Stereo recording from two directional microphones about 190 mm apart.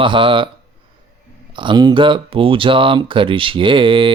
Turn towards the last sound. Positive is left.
turn(degrees=-25)  # may be behind; listen again after turning